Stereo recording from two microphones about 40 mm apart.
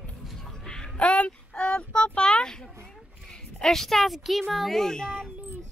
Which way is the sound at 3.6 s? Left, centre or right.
Centre.